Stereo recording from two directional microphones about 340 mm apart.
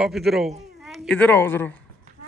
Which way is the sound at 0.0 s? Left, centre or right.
Centre.